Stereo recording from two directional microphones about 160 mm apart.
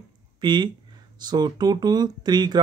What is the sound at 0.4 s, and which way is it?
Speech, 30° right (ahead or behind).